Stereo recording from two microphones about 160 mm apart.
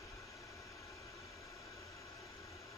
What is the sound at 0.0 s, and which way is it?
White noise, 20° left (ahead or behind).